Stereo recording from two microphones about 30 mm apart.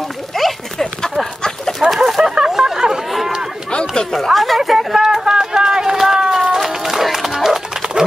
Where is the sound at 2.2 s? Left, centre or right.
Centre.